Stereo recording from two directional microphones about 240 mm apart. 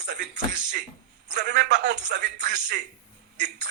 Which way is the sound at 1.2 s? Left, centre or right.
Right.